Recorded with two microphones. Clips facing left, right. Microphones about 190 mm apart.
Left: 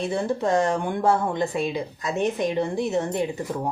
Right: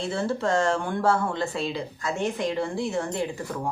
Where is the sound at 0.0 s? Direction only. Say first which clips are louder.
Left 2 dB; 15° left (ahead or behind).